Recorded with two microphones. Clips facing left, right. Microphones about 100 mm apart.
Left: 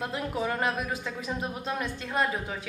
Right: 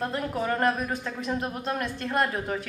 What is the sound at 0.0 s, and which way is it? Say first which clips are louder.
Speech: right 2 dB; 5° left (ahead or behind).